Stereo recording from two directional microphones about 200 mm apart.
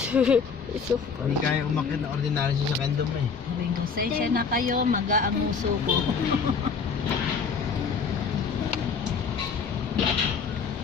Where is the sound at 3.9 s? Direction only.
45° right (ahead or behind).